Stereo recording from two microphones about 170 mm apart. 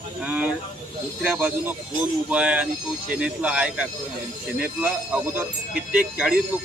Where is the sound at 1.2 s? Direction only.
5° right (ahead or behind).